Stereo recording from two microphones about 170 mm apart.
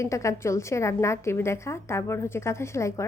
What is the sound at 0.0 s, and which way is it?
A woman's voice, 15° left (ahead or behind).